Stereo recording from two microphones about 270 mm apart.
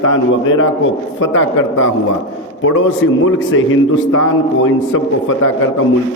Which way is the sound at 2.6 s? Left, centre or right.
Left.